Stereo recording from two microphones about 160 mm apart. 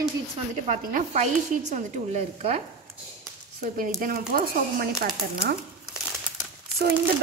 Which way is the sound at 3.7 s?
65° right (ahead or behind).